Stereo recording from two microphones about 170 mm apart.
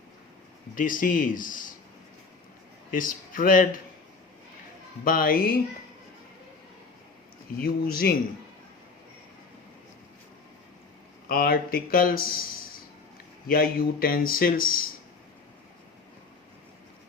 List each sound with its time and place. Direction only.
0.8 s speech: 50° left (ahead or behind)
2.9 s speech: 50° left (ahead or behind)
5.0 s speech: 55° left (ahead or behind)
7.6 s speech: 60° left (ahead or behind)
11.3 s speech: 60° left (ahead or behind)
13.5 s speech: 60° left (ahead or behind)